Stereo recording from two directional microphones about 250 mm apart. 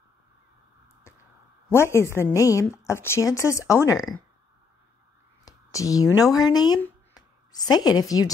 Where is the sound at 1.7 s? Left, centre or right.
Centre.